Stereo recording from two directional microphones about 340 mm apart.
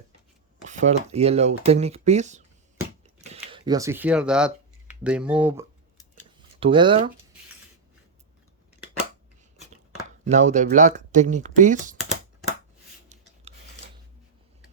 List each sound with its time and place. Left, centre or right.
0.7 s speech: right
10.2 s speech: right